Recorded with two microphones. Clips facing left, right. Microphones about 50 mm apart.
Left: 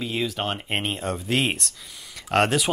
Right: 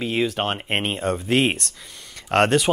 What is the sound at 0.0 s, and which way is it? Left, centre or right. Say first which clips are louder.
Speech: right 4 dB; centre.